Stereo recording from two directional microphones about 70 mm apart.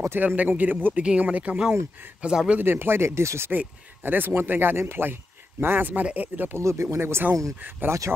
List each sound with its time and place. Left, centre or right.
0.1 s a man's voice: right
2.6 s speech: right
3.5 s a man's voice: right
6.6 s a man's voice: right